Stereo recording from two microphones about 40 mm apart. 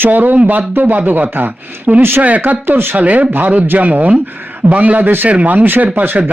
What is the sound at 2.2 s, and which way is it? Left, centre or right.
Speech, right.